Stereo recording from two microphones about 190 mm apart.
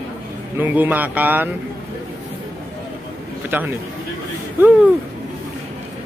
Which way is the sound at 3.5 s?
10° right (ahead or behind).